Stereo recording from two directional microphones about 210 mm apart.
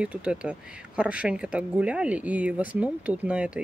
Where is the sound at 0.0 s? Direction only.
5° right (ahead or behind).